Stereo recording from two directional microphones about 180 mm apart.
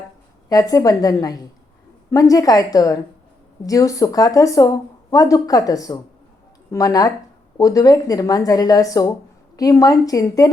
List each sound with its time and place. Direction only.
0.4 s speech: 20° left (ahead or behind)